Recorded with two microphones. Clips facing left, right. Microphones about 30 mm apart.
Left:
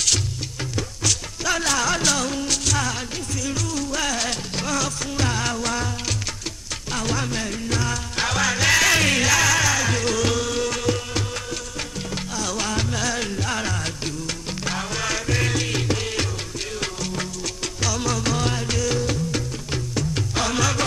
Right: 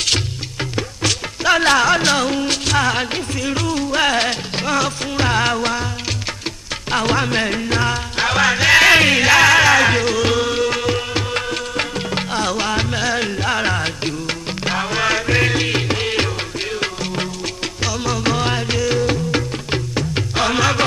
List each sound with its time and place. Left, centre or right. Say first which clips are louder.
0.7 s music: right 4 dB; right
6.9 s music: right 8 dB; right
10.0 s music: right 5 dB; right
11.3 s music: right 9 dB; right
12.5 s music: right 5 dB; right
17.8 s music: right 4 dB; right